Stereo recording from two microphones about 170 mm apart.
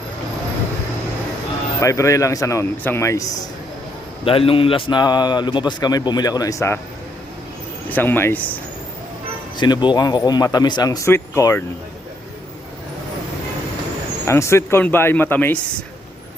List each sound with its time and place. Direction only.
1.8 s speech: 20° left (ahead or behind)
4.3 s a man's voice: 35° left (ahead or behind); by 6.7 s 20° left (ahead or behind)
7.9 s speech: 10° left (ahead or behind)
9.6 s a man's voice: 25° left (ahead or behind)
14.3 s speech: 15° left (ahead or behind)